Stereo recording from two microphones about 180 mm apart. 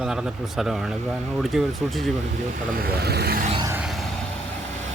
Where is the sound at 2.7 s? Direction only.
60° right (ahead or behind).